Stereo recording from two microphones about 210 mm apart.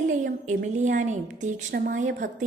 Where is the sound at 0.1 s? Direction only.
35° right (ahead or behind).